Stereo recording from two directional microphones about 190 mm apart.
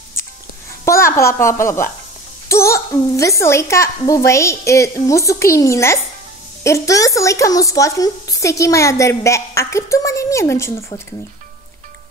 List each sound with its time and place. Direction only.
0.8 s a woman's voice: 15° left (ahead or behind)